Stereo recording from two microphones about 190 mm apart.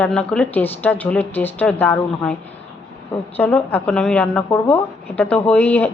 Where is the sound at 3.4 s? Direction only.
10° left (ahead or behind).